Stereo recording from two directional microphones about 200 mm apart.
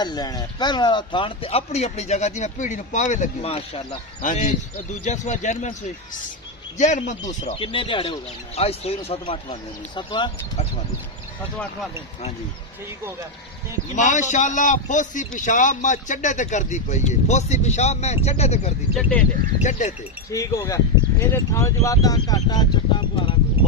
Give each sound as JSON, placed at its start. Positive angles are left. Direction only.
{"t": 0.0, "sound": "speech", "side_deg": 20}
{"t": 7.2, "sound": "speech", "side_deg": 20}
{"t": 13.9, "sound": "speech", "side_deg": 40}
{"t": 20.3, "sound": "speech", "side_deg": 15}